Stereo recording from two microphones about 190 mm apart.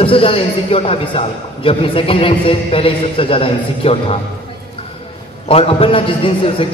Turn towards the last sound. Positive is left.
turn(degrees=30)  # may be behind; listen again after turning